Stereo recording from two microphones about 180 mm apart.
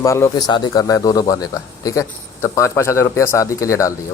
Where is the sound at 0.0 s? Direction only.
15° left (ahead or behind).